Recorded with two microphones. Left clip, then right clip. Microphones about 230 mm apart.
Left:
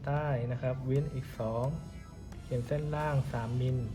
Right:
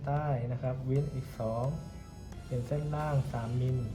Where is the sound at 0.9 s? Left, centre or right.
Centre.